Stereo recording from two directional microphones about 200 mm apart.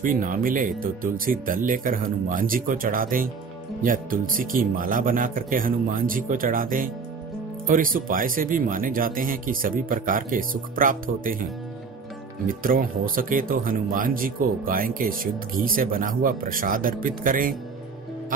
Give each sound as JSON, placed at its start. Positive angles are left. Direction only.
{"t": 0.0, "sound": "speech", "side_deg": -45}
{"t": 12.4, "sound": "speech", "side_deg": -45}